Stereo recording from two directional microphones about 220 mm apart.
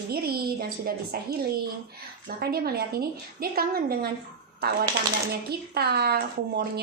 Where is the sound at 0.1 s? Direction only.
45° right (ahead or behind).